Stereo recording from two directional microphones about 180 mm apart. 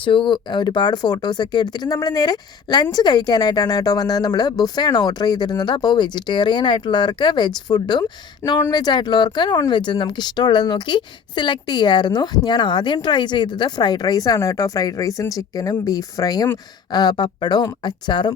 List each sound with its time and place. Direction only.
0.0 s speech: 30° left (ahead or behind)